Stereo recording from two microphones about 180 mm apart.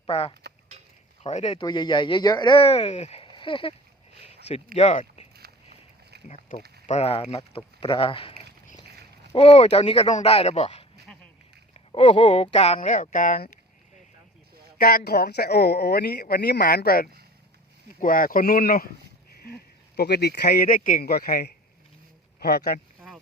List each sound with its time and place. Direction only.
0.1 s speech: 35° left (ahead or behind)
1.5 s speech: 25° left (ahead or behind)
6.2 s speech: 40° left (ahead or behind)
8.9 s a sound: 65° right (ahead or behind)
9.3 s speech: 35° left (ahead or behind)
11.7 s a sound: 30° left (ahead or behind)
12.4 s speech: 35° left (ahead or behind); by 13.6 s 50° left (ahead or behind)
14.8 s speech: 55° left (ahead or behind)
20.0 s speech: 65° left (ahead or behind)